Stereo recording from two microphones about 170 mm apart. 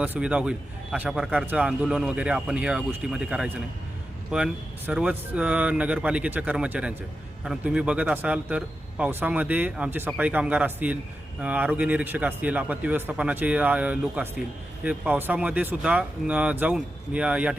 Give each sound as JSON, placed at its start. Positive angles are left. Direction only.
{"t": 0.0, "sound": "a man's voice", "side_deg": -10}